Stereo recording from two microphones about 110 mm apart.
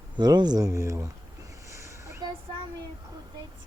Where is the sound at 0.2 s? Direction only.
40° right (ahead or behind).